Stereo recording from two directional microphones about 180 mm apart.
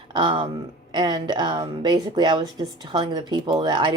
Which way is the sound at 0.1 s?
25° right (ahead or behind).